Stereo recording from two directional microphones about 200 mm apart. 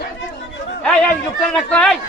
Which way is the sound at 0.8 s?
5° left (ahead or behind).